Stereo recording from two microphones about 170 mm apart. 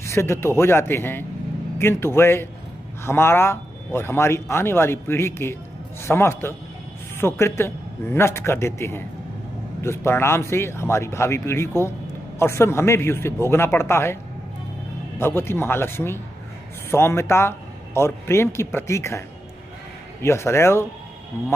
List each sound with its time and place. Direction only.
0.0 s speech: 15° left (ahead or behind)
15.1 s speech: 15° left (ahead or behind)